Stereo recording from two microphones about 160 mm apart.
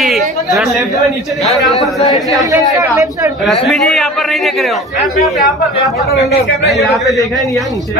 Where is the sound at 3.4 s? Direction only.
Centre (ahead or behind).